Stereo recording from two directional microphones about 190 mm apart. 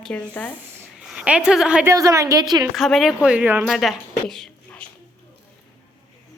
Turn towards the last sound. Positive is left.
turn(degrees=5)  # may be behind; listen again after turning